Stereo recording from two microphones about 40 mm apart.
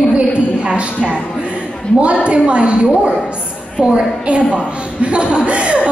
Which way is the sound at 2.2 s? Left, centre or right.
Right.